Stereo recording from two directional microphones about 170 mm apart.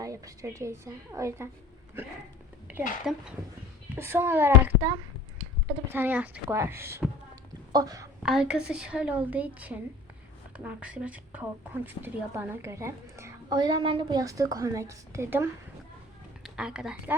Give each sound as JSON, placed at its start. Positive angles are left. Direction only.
{"t": 0.0, "sound": "a woman's voice", "side_deg": -20}
{"t": 3.1, "sound": "a woman's voice", "side_deg": 0}
{"t": 3.9, "sound": "a woman's voice", "side_deg": -15}
{"t": 4.7, "sound": "speech", "side_deg": -25}
{"t": 5.9, "sound": "a woman's voice", "side_deg": -10}
{"t": 8.2, "sound": "a woman's voice", "side_deg": -5}